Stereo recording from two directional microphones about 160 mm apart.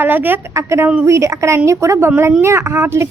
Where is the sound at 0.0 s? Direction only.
10° right (ahead or behind).